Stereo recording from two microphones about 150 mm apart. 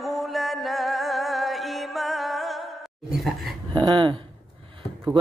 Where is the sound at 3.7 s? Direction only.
30° right (ahead or behind).